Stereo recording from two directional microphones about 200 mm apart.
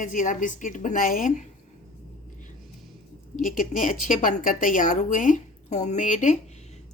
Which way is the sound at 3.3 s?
40° left (ahead or behind).